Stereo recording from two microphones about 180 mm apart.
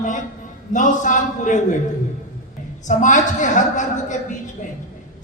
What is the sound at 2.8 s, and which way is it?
Speech, 45° left (ahead or behind).